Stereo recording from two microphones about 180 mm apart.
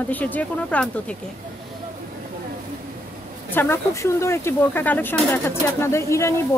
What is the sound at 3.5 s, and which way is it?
Speech, 15° left (ahead or behind).